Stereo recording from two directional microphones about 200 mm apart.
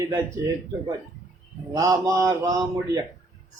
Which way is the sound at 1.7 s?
15° right (ahead or behind).